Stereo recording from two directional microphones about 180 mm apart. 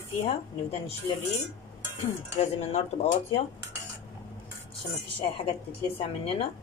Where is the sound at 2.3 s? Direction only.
35° left (ahead or behind).